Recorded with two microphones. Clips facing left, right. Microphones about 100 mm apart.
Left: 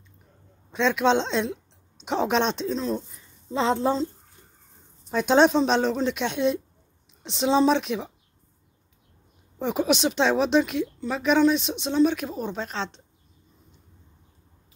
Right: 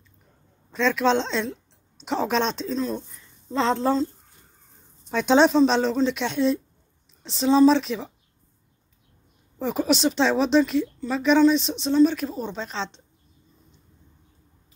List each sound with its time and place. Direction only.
0.8 s a woman's voice: 5° left (ahead or behind)
3.5 s a woman's voice: 10° left (ahead or behind)
5.1 s a woman's voice: 5° left (ahead or behind)
7.2 s a woman's voice: 15° left (ahead or behind)
9.6 s a woman's voice: 5° left (ahead or behind)